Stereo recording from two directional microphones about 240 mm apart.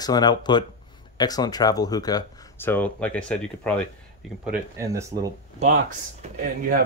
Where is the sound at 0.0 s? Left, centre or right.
Centre.